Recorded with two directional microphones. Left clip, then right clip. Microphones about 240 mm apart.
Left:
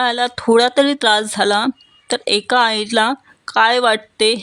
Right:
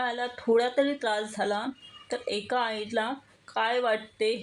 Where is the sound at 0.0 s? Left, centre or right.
Left.